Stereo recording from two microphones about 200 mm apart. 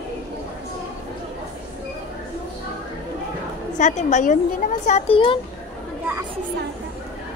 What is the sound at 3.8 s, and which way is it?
A woman's voice, 35° left (ahead or behind).